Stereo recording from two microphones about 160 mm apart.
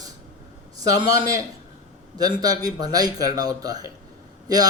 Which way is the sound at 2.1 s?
25° right (ahead or behind).